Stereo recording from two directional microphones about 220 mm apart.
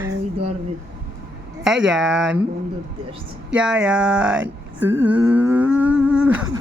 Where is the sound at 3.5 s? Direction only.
5° right (ahead or behind).